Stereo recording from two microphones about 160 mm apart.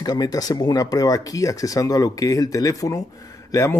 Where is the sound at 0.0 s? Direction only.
25° left (ahead or behind).